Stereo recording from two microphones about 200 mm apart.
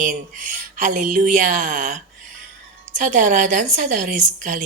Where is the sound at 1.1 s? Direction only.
40° right (ahead or behind).